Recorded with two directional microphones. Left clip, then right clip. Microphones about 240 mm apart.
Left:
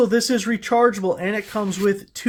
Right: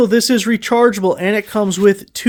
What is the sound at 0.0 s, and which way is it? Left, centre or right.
Speech, right.